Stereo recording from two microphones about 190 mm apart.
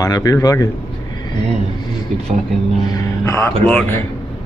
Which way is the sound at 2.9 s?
15° left (ahead or behind).